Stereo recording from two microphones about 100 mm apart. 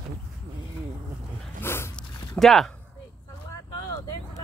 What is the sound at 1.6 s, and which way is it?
Dog, 25° left (ahead or behind).